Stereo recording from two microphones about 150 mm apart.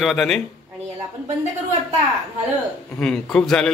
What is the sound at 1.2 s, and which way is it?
Speech, 50° right (ahead or behind).